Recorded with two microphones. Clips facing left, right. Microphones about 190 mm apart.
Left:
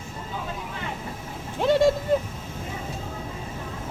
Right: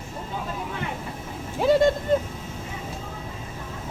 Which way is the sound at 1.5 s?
Centre (ahead or behind).